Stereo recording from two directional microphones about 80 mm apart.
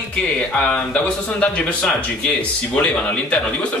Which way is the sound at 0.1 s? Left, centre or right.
Centre.